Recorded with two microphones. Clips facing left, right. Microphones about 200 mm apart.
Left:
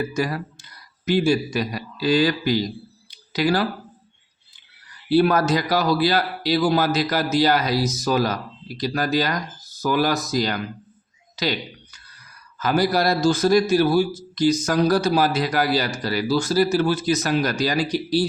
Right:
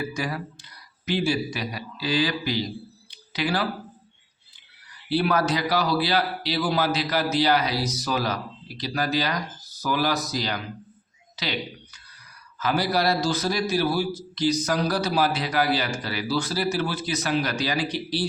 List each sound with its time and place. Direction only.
0.1 s a man's voice: 45° left (ahead or behind)
3.1 s a sound: 40° left (ahead or behind)
5.0 s a man's voice: 45° left (ahead or behind)